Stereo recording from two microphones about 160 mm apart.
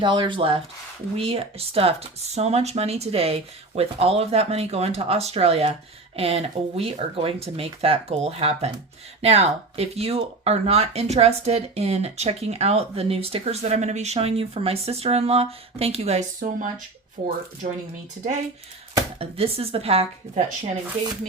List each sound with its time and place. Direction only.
0.0 s speech: 30° right (ahead or behind)
16.4 s speech: 55° right (ahead or behind)
19.2 s speech: 35° right (ahead or behind)